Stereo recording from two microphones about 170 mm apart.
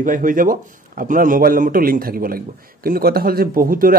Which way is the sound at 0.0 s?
50° right (ahead or behind).